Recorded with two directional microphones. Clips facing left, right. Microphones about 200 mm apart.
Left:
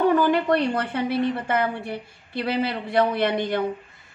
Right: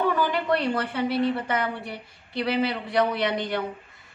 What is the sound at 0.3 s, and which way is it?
A woman's voice, 50° left (ahead or behind).